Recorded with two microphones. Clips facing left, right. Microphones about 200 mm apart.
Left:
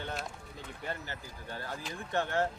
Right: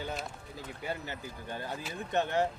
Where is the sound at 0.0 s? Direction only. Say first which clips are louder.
Right 1 dB; centre (ahead or behind).